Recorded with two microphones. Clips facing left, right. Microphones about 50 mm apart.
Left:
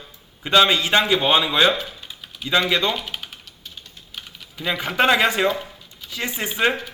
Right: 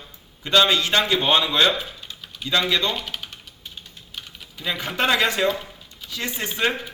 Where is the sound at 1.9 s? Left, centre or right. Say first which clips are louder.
Even; centre.